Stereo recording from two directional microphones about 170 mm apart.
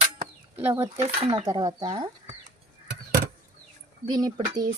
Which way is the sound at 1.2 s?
35° right (ahead or behind).